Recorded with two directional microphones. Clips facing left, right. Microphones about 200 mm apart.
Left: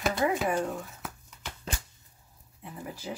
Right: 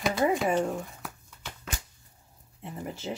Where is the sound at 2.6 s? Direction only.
25° right (ahead or behind).